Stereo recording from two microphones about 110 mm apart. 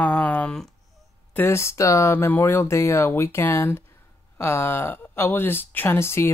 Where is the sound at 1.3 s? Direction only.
25° left (ahead or behind).